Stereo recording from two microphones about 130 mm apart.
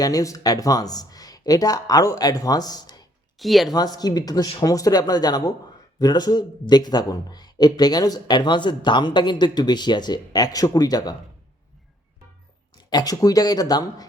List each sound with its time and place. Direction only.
0.0 s speech: 25° left (ahead or behind)
3.3 s speech: centre (ahead or behind)
3.7 s speech: 30° left (ahead or behind)
12.7 s speech: 30° left (ahead or behind)